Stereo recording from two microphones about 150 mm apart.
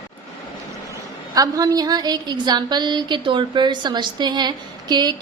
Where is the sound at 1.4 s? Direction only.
25° right (ahead or behind).